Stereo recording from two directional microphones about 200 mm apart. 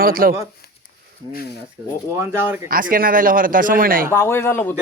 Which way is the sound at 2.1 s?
10° right (ahead or behind).